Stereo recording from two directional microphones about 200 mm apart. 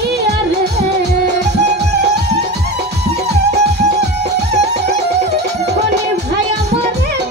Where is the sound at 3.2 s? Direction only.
55° right (ahead or behind).